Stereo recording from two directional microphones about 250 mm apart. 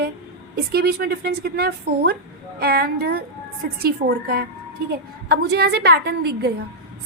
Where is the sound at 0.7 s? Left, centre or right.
Right.